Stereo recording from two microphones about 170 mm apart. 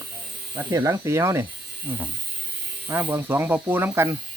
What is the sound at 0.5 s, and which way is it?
Speech, 20° right (ahead or behind).